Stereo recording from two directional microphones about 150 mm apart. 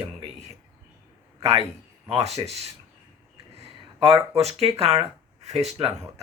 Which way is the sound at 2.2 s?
45° right (ahead or behind).